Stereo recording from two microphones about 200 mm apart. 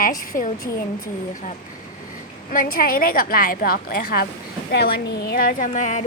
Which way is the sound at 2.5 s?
45° left (ahead or behind).